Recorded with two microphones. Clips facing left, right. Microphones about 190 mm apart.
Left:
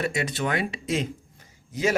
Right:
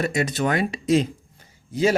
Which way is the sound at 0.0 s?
40° right (ahead or behind).